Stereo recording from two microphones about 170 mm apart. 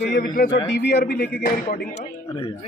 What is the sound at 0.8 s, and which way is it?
Speech, 70° left (ahead or behind).